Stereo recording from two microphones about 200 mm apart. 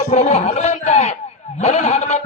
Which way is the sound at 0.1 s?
35° left (ahead or behind).